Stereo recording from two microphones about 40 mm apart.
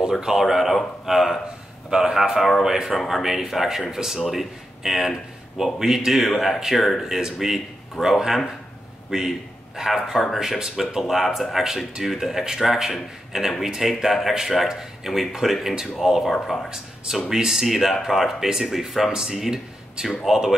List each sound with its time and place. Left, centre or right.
0.4 s speech: centre
1.9 s a man's voice: centre
2.1 s speech: centre
9.1 s a man's voice: right
10.1 s speech: centre
10.6 s speech: centre
16.7 s speech: centre